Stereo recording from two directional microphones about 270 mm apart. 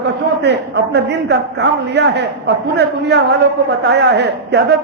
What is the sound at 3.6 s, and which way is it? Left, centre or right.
A man's voice, right.